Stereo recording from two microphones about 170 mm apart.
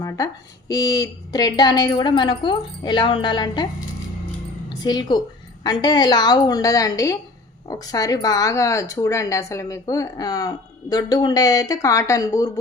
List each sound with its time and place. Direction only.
0.7 s speech: 20° left (ahead or behind)
4.7 s speech: 25° left (ahead or behind)